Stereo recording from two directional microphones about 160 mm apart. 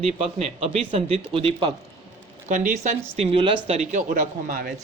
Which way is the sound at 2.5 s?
55° right (ahead or behind).